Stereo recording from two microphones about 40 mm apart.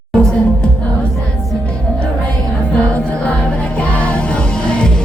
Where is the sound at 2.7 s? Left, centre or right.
Left.